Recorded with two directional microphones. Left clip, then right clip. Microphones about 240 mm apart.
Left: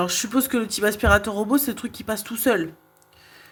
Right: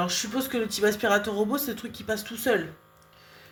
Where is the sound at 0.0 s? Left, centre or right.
Left.